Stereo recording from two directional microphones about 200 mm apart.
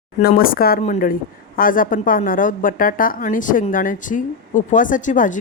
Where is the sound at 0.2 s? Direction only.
50° left (ahead or behind).